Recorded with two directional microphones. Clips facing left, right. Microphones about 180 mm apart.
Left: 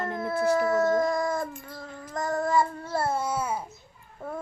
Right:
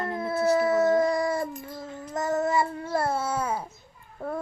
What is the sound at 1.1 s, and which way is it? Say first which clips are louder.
Dog: right 1 dB; 15° right (ahead or behind).